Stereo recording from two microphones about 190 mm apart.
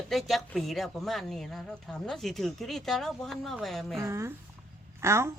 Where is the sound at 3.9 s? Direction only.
15° right (ahead or behind).